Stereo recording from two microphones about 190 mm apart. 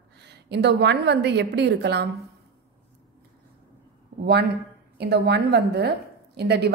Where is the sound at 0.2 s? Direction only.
60° right (ahead or behind).